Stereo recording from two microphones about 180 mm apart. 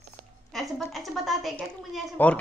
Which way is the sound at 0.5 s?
Centre (ahead or behind).